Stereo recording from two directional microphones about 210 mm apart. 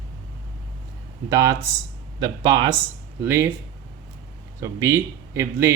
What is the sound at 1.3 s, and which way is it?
Speech, 15° right (ahead or behind).